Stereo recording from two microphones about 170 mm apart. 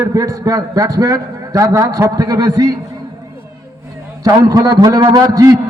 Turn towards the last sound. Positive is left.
turn(degrees=-20)  # may be behind; listen again after turning